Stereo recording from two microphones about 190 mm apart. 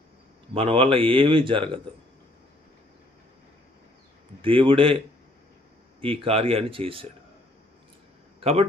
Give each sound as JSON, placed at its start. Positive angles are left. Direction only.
{"t": 0.6, "sound": "speech", "side_deg": -30}
{"t": 4.4, "sound": "speech", "side_deg": -30}
{"t": 8.4, "sound": "speech", "side_deg": -35}